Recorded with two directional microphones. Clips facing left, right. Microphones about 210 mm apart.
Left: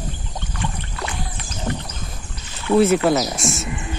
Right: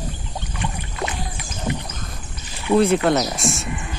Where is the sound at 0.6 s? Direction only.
20° right (ahead or behind).